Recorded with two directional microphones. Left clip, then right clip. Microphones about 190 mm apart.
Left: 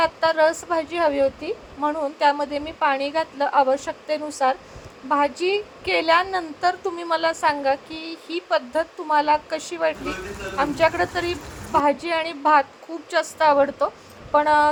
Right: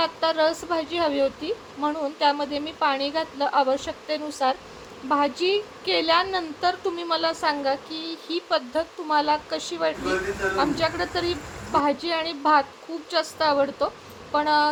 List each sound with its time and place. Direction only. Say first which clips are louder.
0.0 s a woman's voice: left 4 dB; 10° left (ahead or behind)